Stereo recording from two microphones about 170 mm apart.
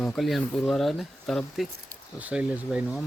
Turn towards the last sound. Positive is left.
turn(degrees=-5)  # may be behind; listen again after turning